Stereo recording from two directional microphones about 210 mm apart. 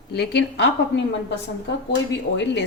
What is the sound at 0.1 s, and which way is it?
Speech, 50° left (ahead or behind).